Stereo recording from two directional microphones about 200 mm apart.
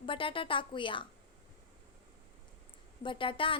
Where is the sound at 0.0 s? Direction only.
25° left (ahead or behind).